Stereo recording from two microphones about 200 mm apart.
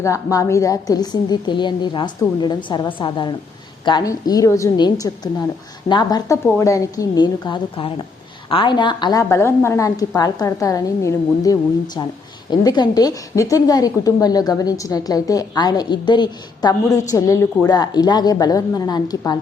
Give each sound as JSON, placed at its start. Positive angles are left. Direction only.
{"t": 0.0, "sound": "a woman's voice", "side_deg": 15}